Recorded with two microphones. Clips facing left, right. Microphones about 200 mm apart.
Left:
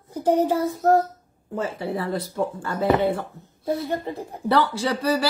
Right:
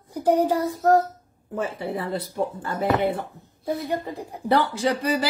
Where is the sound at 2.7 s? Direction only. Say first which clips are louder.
Left 3 dB; 15° left (ahead or behind).